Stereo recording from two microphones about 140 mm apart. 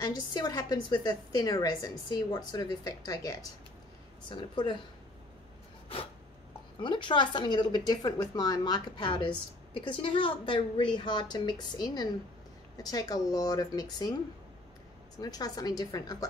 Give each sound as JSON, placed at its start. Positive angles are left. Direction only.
{"t": 0.0, "sound": "a woman's voice", "side_deg": 30}
{"t": 6.8, "sound": "a woman's voice", "side_deg": 35}
{"t": 15.1, "sound": "a woman's voice", "side_deg": 25}